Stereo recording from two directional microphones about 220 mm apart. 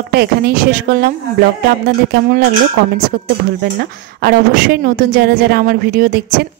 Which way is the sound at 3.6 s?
45° right (ahead or behind).